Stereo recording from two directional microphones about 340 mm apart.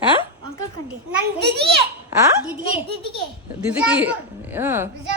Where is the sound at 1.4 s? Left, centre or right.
Right.